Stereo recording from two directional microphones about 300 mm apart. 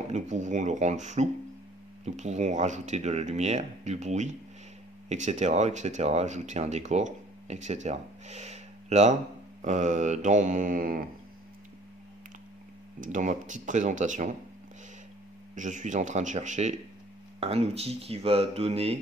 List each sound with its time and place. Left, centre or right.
0.1 s speech: right
13.0 s speech: right
15.5 s speech: right